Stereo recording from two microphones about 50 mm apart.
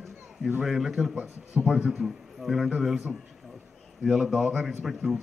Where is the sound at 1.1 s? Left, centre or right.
Right.